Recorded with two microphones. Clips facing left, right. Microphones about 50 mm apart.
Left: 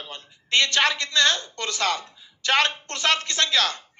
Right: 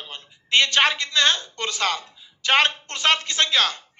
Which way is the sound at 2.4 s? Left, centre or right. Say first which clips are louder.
Right 2 dB; right.